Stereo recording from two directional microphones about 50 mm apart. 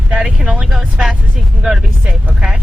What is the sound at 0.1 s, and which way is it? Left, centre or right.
Vehicle, centre.